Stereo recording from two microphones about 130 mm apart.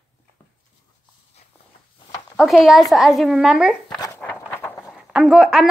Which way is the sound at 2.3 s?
Centre (ahead or behind).